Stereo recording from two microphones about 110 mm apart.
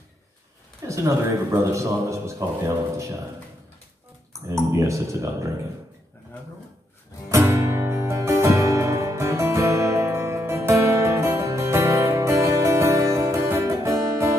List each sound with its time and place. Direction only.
0.8 s speech: 30° right (ahead or behind)
4.3 s speech: 25° right (ahead or behind)
7.2 s music: 25° right (ahead or behind)